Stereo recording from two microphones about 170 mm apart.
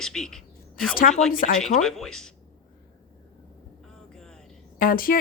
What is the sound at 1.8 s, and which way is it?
Speech, 5° left (ahead or behind).